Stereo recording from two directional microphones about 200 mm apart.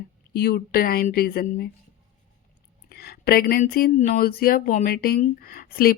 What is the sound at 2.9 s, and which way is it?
Speech, 50° left (ahead or behind).